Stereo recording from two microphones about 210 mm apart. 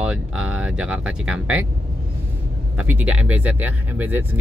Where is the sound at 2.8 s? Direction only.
10° right (ahead or behind).